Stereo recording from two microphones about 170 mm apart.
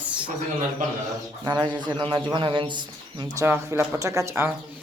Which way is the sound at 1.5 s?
25° right (ahead or behind).